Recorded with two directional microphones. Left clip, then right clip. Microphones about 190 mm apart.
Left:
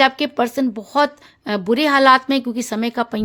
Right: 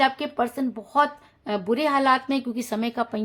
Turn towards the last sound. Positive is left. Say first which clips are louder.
# left 5 dB
turn(degrees=45)  # may be behind; listen again after turning